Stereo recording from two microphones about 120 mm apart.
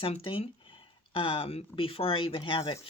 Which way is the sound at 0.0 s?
50° left (ahead or behind).